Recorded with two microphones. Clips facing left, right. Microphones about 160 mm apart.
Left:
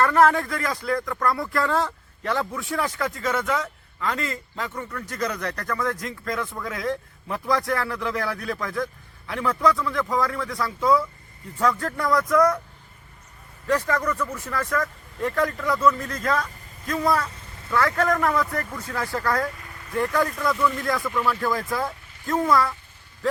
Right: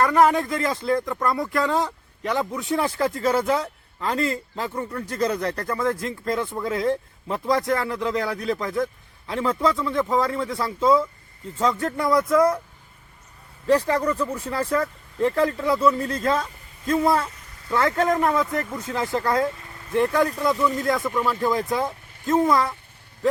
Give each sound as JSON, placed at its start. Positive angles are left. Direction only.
{"t": 0.0, "sound": "speech", "side_deg": -15}
{"t": 13.7, "sound": "speech", "side_deg": -30}